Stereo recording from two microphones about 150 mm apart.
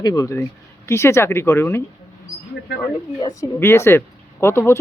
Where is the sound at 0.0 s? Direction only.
25° left (ahead or behind).